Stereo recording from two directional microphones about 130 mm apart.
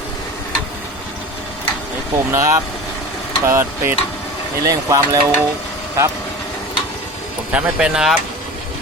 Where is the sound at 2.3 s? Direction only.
25° right (ahead or behind).